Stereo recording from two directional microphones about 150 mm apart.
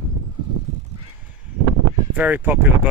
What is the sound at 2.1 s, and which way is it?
Speech, 10° right (ahead or behind).